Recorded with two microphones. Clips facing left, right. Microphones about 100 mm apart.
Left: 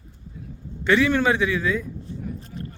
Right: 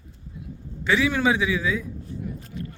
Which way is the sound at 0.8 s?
Centre (ahead or behind).